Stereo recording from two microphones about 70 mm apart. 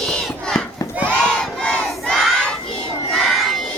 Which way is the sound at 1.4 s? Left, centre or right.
Centre.